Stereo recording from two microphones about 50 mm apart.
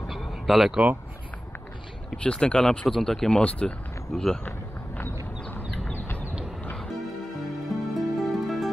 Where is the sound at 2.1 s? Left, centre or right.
Centre.